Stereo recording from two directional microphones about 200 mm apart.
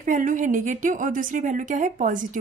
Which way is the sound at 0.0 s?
40° right (ahead or behind).